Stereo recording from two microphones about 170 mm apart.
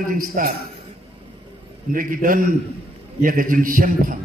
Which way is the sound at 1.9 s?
55° right (ahead or behind).